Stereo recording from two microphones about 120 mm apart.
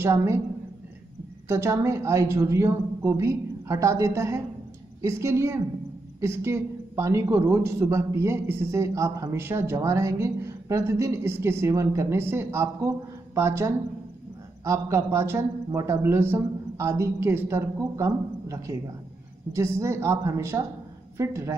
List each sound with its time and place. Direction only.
0.0 s speech: 20° right (ahead or behind)
1.5 s speech: 25° right (ahead or behind)